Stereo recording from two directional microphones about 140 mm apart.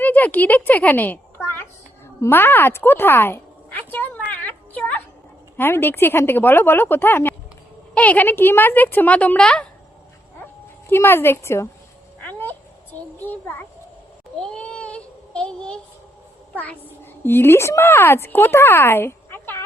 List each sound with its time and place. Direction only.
0.0 s a child's voice: 10° left (ahead or behind)
4.3 s a sound: 10° left (ahead or behind)
5.5 s speech: 15° left (ahead or behind)
10.8 s speech: 15° left (ahead or behind)
12.2 s a sound: 15° left (ahead or behind)
14.3 s child singing: 5° left (ahead or behind)
16.6 s a child's voice: 15° left (ahead or behind)